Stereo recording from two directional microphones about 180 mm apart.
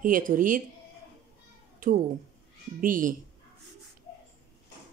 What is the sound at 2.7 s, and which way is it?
Speech, 50° right (ahead or behind).